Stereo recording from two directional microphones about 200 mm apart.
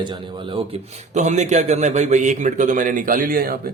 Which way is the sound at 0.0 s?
25° right (ahead or behind).